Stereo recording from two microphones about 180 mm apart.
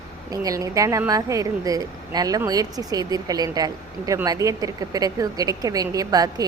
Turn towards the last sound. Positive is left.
turn(degrees=-20)  # may be behind; listen again after turning